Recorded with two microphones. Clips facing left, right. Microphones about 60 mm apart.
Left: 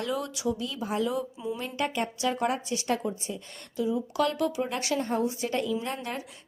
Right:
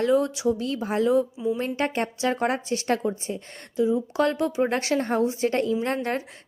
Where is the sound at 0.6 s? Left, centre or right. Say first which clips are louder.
Right 5 dB; right.